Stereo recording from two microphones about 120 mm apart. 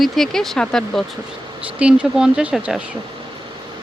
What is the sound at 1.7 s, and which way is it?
Speech, 10° right (ahead or behind).